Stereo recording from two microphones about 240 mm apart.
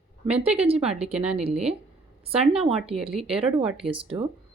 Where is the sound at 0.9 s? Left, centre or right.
Right.